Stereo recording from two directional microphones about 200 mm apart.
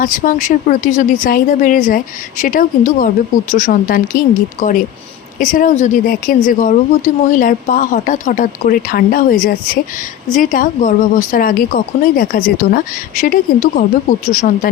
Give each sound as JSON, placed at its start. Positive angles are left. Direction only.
{"t": 0.0, "sound": "speech", "side_deg": 40}
{"t": 5.4, "sound": "speech", "side_deg": 40}